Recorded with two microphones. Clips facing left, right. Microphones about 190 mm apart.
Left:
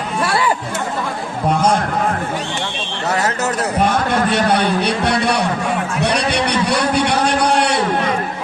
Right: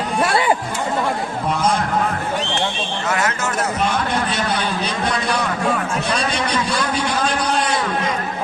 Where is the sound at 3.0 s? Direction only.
35° left (ahead or behind).